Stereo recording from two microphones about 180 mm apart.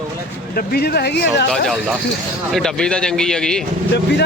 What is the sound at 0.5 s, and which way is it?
Speech, 60° left (ahead or behind).